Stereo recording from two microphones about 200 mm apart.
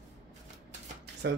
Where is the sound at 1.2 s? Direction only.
60° right (ahead or behind).